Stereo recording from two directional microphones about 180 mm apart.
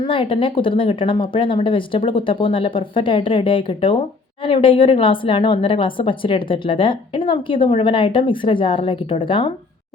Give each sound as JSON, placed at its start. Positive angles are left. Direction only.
{"t": 0.0, "sound": "speech", "side_deg": 30}